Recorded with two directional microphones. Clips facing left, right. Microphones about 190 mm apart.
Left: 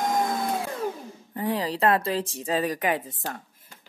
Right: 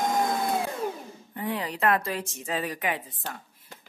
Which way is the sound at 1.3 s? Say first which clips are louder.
Left 4 dB; 35° left (ahead or behind).